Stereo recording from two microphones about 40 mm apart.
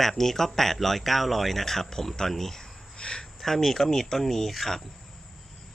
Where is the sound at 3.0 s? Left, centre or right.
Left.